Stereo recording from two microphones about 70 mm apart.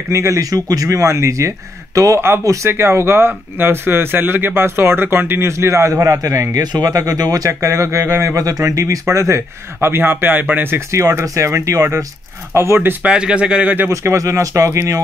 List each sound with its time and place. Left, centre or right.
0.1 s speech: right
2.7 s speech: right
6.6 s speech: right
10.9 s speech: right
13.0 s speech: centre
13.8 s speech: right